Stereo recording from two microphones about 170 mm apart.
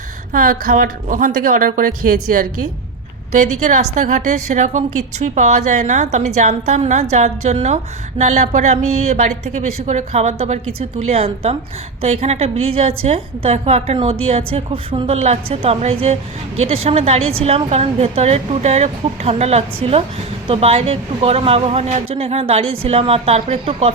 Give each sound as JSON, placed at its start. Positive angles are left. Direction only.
{"t": 0.3, "sound": "a woman's voice", "side_deg": -50}
{"t": 3.3, "sound": "a woman's voice", "side_deg": -45}